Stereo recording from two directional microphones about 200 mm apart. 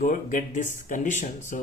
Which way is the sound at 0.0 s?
40° left (ahead or behind).